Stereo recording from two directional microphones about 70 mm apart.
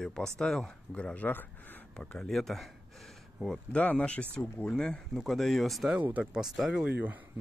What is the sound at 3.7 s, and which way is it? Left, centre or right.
Speech, centre.